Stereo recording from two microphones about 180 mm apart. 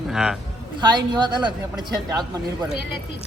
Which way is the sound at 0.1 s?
5° right (ahead or behind).